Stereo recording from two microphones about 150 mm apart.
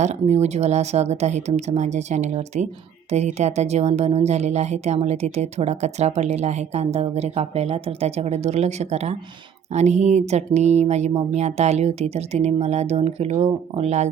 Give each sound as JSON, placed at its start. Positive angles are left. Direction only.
{"t": 0.0, "sound": "speech", "side_deg": -50}